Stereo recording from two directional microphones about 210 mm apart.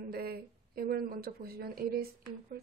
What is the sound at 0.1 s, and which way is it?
A woman's voice, 45° right (ahead or behind).